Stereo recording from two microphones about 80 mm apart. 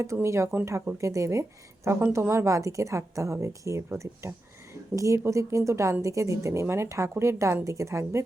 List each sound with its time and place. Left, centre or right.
0.0 s speech: right